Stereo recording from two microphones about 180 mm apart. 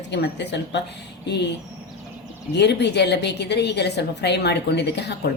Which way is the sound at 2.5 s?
70° left (ahead or behind).